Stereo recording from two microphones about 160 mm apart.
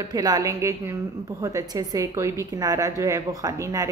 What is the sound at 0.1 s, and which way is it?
A woman's voice, 25° right (ahead or behind).